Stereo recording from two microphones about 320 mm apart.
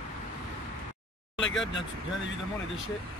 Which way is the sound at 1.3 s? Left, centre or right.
Left.